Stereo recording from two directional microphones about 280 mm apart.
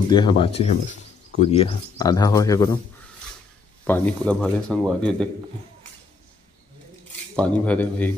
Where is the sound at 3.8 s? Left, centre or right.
Centre.